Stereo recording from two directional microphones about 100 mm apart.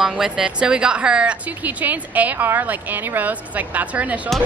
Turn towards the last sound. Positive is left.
turn(degrees=-15)  # may be behind; listen again after turning